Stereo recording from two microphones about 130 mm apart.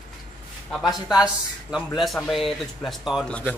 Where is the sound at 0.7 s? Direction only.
Centre (ahead or behind).